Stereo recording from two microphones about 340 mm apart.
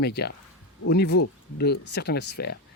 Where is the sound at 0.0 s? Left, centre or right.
Left.